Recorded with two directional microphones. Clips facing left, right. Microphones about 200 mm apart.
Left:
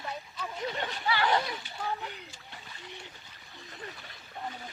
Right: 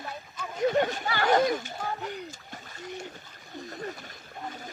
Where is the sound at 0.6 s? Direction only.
45° right (ahead or behind).